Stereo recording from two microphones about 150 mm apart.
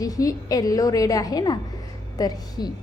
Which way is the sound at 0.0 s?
25° left (ahead or behind).